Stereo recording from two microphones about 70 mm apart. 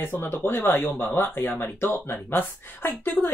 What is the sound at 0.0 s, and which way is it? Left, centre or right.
Speech, left.